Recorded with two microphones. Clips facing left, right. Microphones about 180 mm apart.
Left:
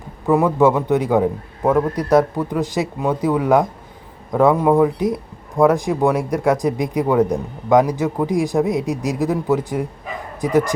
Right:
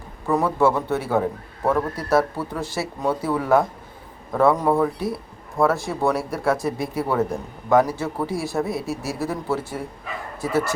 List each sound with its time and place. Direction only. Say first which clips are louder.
0.3 s speech: left 5 dB; 15° left (ahead or behind)